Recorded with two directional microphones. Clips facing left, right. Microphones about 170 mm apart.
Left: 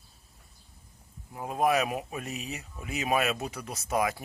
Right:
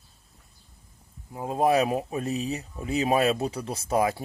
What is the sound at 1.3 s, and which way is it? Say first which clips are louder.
Speech: right 3 dB; 25° right (ahead or behind).